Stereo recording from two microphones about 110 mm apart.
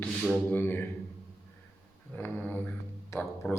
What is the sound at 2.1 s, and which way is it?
Mantra, 15° left (ahead or behind).